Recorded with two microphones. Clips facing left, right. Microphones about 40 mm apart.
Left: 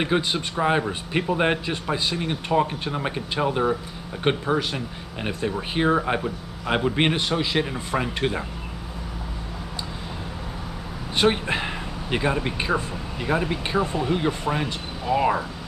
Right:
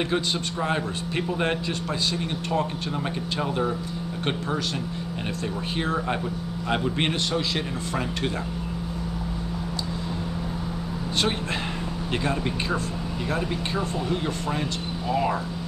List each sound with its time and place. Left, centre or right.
0.0 s a man's voice: centre
11.1 s a man's voice: centre